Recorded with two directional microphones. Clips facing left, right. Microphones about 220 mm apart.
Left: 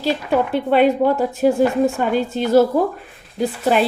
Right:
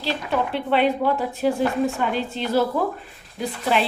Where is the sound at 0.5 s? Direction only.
45° left (ahead or behind).